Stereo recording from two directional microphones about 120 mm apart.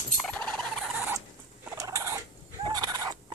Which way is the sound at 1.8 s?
30° right (ahead or behind).